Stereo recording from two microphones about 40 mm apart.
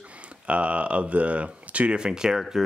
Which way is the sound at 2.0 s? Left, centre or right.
Centre.